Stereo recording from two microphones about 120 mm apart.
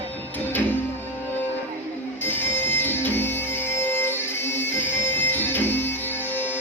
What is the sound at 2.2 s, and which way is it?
Music, 15° left (ahead or behind).